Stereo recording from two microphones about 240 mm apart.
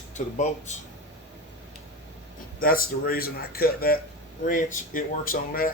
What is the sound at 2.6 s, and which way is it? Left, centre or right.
Speech, left.